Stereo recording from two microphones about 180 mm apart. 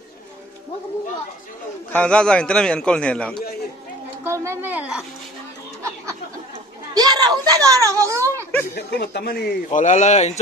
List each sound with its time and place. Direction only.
1.9 s a man's voice: 5° left (ahead or behind)
4.2 s speech: 15° right (ahead or behind)
5.8 s a sound: 15° right (ahead or behind)
6.9 s speech: 20° right (ahead or behind)
8.7 s speech: 65° left (ahead or behind)
9.7 s a man's voice: 40° left (ahead or behind)